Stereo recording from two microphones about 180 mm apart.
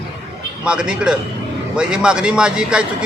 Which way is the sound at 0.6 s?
5° right (ahead or behind).